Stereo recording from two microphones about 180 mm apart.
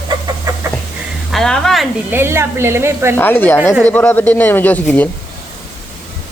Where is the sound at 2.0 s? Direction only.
15° right (ahead or behind).